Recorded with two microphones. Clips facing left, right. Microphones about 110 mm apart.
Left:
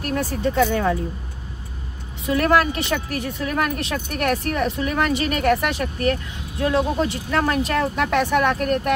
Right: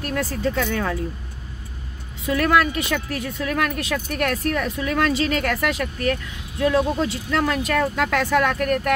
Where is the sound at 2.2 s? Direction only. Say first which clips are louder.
Left 1 dB; 30° left (ahead or behind).